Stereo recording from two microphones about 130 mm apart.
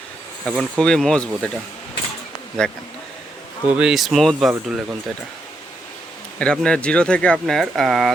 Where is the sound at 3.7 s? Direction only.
10° right (ahead or behind).